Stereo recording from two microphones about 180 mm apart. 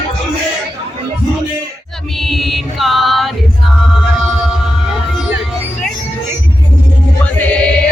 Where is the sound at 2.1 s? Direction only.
Centre (ahead or behind).